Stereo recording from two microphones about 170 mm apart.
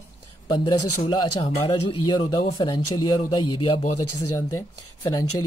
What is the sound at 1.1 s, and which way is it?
Speech, 25° left (ahead or behind).